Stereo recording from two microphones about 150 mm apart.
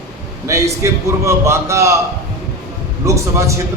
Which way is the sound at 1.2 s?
20° right (ahead or behind).